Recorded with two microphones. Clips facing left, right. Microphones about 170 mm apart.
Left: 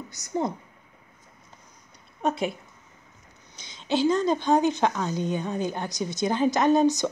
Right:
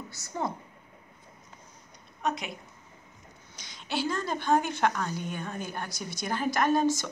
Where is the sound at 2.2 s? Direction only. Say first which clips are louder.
Left 6 dB; 30° left (ahead or behind).